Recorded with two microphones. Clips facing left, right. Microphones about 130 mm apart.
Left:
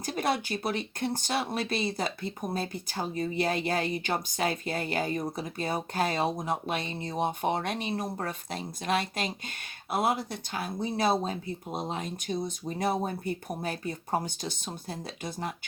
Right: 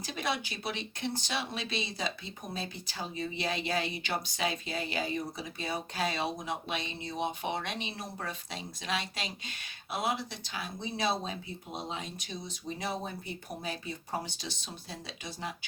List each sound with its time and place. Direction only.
0.0 s speech: 50° left (ahead or behind)